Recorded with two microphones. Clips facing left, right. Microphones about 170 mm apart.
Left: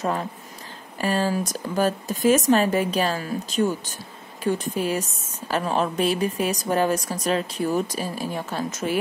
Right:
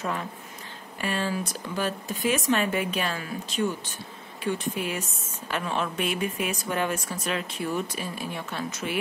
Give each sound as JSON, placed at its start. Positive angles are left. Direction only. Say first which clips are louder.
{"t": 0.0, "sound": "a woman's voice", "louder": "left 5 dB", "side_deg": 35}